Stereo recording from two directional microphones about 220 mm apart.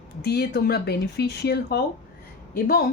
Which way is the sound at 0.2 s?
50° left (ahead or behind).